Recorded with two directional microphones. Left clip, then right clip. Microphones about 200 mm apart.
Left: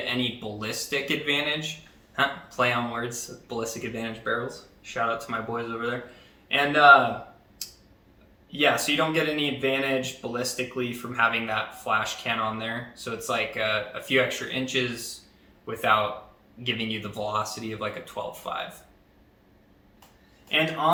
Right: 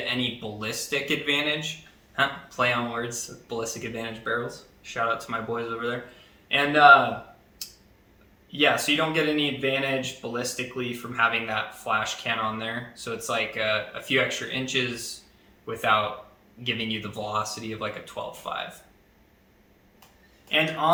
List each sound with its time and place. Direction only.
0.1 s speech: 5° right (ahead or behind)
7.6 s tick-tock: centre (ahead or behind)
8.5 s speech: centre (ahead or behind)
20.5 s a man's voice: 10° right (ahead or behind)